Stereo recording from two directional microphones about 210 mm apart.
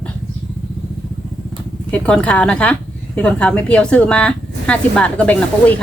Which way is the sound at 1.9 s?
5° left (ahead or behind).